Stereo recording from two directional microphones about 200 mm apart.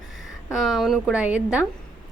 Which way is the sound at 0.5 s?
Centre (ahead or behind).